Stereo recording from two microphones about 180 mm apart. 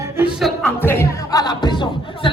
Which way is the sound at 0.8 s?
10° left (ahead or behind).